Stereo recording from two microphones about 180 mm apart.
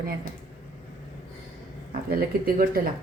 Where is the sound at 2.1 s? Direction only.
55° right (ahead or behind).